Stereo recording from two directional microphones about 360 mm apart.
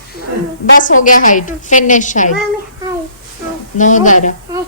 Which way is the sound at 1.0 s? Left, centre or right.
Left.